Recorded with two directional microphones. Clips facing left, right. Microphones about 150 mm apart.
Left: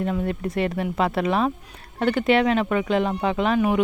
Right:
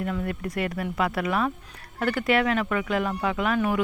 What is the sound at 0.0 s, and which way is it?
Speech, 25° left (ahead or behind).